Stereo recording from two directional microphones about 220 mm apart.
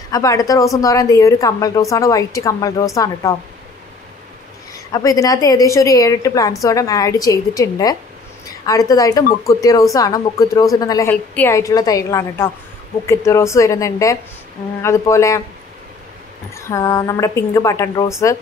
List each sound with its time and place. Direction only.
0.1 s a woman's voice: 15° left (ahead or behind)
4.7 s a woman's voice: 15° left (ahead or behind)
16.5 s a woman's voice: 15° left (ahead or behind)